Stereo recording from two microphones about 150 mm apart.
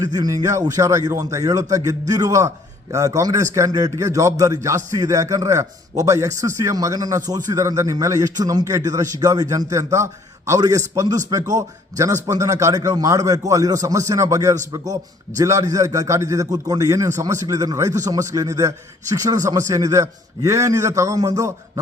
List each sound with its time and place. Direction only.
0.0 s a man's voice: 25° right (ahead or behind)